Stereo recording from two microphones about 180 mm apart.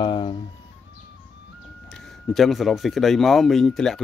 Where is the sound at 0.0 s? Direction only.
25° left (ahead or behind).